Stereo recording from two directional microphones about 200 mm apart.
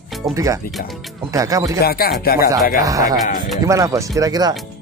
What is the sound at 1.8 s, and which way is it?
Speech, 50° left (ahead or behind).